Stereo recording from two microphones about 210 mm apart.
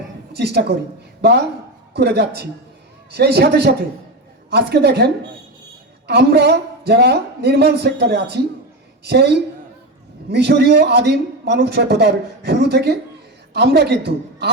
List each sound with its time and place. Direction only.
0.3 s a man's voice: 50° right (ahead or behind)